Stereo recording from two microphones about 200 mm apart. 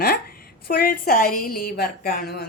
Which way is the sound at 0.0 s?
50° left (ahead or behind).